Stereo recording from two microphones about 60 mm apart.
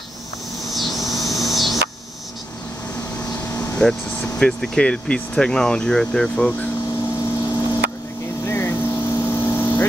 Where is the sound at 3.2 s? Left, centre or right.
Left.